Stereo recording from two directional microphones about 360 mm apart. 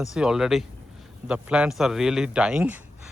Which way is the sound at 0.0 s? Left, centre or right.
Centre.